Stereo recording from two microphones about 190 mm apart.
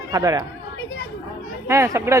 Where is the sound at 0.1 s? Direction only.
20° right (ahead or behind).